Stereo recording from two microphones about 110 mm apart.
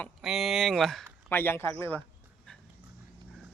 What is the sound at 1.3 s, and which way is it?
Speech, 20° left (ahead or behind).